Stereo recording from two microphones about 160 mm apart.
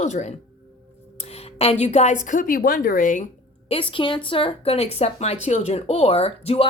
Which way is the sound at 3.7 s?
35° left (ahead or behind).